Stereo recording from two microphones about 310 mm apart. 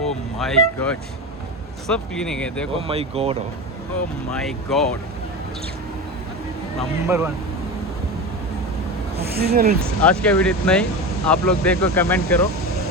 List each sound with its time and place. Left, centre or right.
0.0 s vehicle: centre
1.9 s speech: centre
2.7 s speech: centre
4.3 s speech: centre
6.7 s speech: centre
9.3 s speech: right
10.0 s speech: centre